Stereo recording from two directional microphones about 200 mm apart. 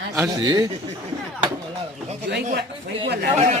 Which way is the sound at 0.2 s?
20° right (ahead or behind).